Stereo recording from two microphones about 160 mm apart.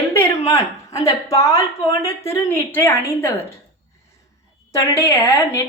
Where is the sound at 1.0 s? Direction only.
20° left (ahead or behind).